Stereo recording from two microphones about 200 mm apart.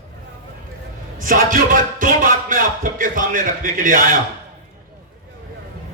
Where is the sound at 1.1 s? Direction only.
40° right (ahead or behind).